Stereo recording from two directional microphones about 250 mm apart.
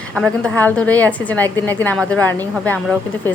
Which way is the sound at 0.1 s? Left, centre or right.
Centre.